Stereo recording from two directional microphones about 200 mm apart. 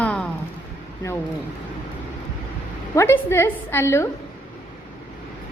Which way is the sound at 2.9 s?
10° left (ahead or behind).